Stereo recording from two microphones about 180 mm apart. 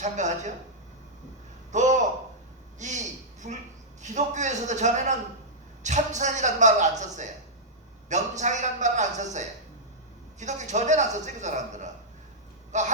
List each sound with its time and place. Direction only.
0.0 s speech: 40° right (ahead or behind)
1.7 s a sound: 40° right (ahead or behind)
4.0 s speech: 40° right (ahead or behind)